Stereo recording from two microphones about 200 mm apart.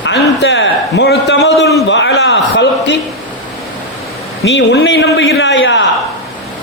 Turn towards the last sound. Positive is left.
turn(degrees=65)  # may be behind; listen again after turning